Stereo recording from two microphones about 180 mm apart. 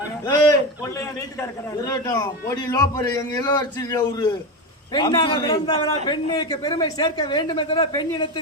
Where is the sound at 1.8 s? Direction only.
20° left (ahead or behind).